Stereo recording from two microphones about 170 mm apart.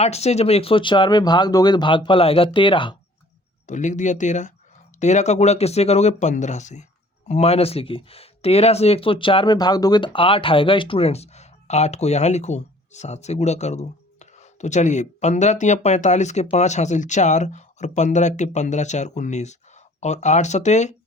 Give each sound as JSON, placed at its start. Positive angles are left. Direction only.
{"t": 0.0, "sound": "speech", "side_deg": 40}
{"t": 3.7, "sound": "speech", "side_deg": 45}